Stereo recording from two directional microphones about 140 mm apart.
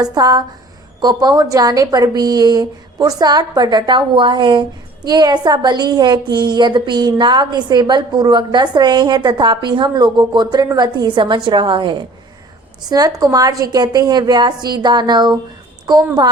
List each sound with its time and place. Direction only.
0.0 s a woman's voice: 25° right (ahead or behind)